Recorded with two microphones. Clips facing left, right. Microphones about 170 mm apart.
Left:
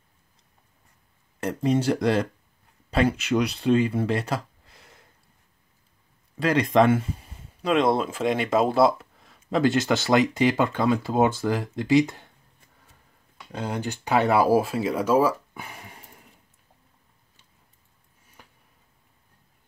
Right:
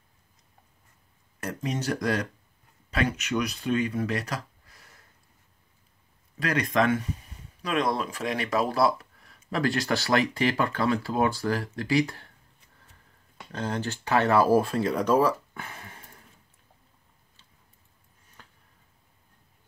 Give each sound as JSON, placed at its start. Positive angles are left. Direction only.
{"t": 1.4, "sound": "speech", "side_deg": 30}
{"t": 6.4, "sound": "speech", "side_deg": 25}
{"t": 13.5, "sound": "speech", "side_deg": 15}
{"t": 18.4, "sound": "a sound", "side_deg": 15}